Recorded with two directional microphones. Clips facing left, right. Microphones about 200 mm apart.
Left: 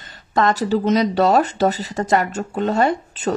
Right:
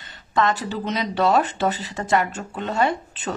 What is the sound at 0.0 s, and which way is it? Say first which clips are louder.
Speech: left 3 dB; 40° left (ahead or behind).